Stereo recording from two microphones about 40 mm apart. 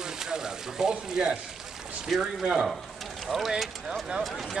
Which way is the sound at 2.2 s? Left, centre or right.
Centre.